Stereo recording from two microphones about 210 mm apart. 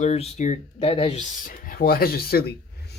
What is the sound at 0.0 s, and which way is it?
Speech, 35° left (ahead or behind).